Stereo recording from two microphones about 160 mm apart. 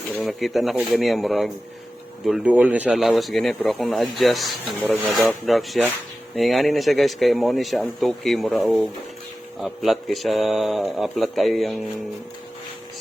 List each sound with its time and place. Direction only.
0.2 s speech: centre (ahead or behind)